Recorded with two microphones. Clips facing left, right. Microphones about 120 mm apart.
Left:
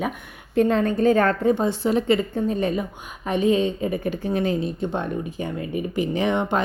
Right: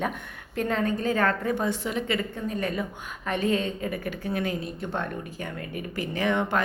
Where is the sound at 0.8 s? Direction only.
30° left (ahead or behind).